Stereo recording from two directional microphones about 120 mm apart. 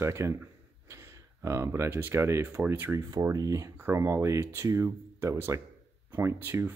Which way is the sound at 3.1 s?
30° right (ahead or behind).